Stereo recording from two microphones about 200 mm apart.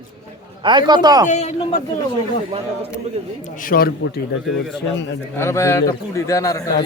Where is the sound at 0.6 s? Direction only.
20° right (ahead or behind).